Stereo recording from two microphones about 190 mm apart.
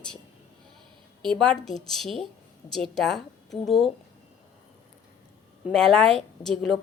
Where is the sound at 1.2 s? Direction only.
5° left (ahead or behind).